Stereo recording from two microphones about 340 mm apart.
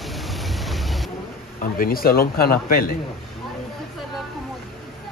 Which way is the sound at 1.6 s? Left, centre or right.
Left.